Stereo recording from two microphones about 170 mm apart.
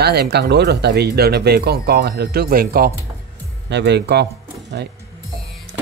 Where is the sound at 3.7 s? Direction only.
90° right; by 4.9 s 70° right (ahead or behind).